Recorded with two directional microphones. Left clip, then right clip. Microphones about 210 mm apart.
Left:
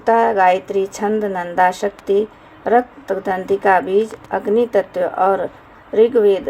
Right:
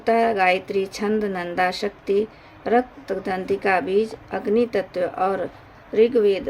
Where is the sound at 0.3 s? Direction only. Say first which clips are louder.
Left 5 dB; 10° right (ahead or behind).